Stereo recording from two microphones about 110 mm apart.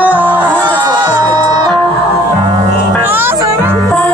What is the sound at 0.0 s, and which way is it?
Crowd, 15° right (ahead or behind).